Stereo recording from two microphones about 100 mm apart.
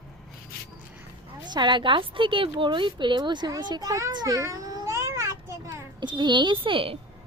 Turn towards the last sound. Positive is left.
turn(degrees=-65)  # may be behind; listen again after turning